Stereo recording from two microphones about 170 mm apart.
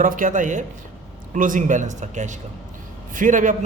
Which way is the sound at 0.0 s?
50° right (ahead or behind).